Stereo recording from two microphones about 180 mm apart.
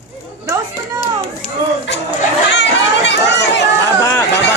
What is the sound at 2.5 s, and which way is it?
Chatter, 75° left (ahead or behind).